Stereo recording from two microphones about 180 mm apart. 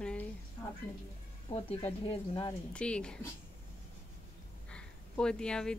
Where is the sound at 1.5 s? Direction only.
30° left (ahead or behind).